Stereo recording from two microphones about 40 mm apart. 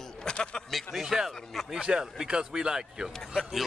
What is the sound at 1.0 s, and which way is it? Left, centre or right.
Speech, centre.